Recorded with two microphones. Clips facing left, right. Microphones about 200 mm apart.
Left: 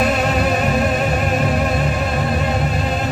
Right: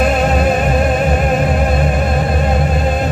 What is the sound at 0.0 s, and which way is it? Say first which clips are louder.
Music: right 4 dB; 40° right (ahead or behind).